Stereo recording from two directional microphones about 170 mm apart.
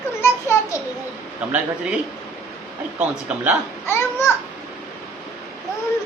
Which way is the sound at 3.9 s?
15° left (ahead or behind).